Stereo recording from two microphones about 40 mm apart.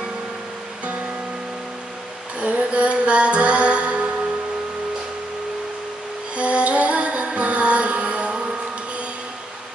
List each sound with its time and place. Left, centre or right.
2.4 s music: right
6.3 s music: right